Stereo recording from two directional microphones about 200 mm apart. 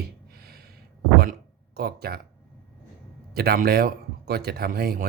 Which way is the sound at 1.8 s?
50° right (ahead or behind).